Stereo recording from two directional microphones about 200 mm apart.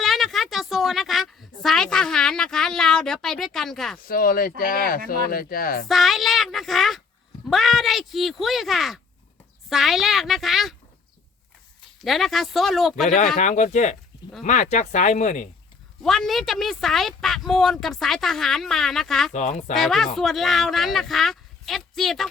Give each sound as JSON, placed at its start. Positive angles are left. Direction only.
{"t": 0.0, "sound": "a woman's voice", "side_deg": 0}
{"t": 4.0, "sound": "speech", "side_deg": 45}
{"t": 5.9, "sound": "a child's voice", "side_deg": 0}
{"t": 12.0, "sound": "speech", "side_deg": 0}
{"t": 13.4, "sound": "speech", "side_deg": 35}
{"t": 16.0, "sound": "speech", "side_deg": 0}
{"t": 19.3, "sound": "speech", "side_deg": 35}
{"t": 19.7, "sound": "speech", "side_deg": 0}